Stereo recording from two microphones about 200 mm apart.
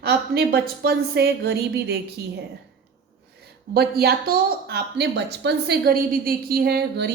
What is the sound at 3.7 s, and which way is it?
Speech, 50° right (ahead or behind).